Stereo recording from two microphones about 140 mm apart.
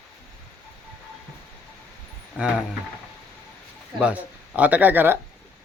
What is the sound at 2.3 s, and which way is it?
Speech, 5° right (ahead or behind).